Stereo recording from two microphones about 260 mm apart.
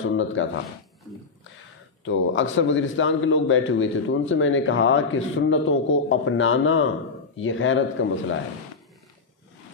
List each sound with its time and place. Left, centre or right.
0.0 s speech: left
2.0 s a man's voice: left